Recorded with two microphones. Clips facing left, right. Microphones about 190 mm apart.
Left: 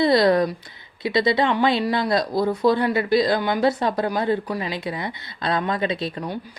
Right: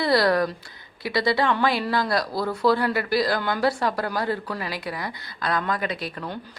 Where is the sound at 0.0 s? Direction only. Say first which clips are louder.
Left 4 dB; 20° left (ahead or behind).